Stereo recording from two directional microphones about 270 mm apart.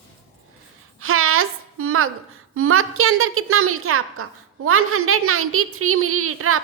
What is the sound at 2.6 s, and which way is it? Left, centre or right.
A woman's voice, right.